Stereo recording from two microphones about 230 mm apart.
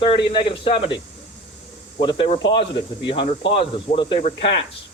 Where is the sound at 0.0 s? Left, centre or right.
Left.